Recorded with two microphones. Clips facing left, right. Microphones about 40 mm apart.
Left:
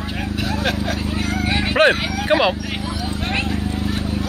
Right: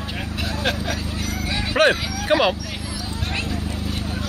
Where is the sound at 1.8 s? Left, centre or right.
Centre.